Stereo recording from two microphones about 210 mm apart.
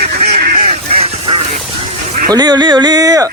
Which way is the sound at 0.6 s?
25° right (ahead or behind).